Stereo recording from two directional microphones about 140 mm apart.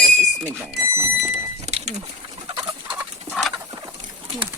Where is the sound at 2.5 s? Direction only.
30° right (ahead or behind).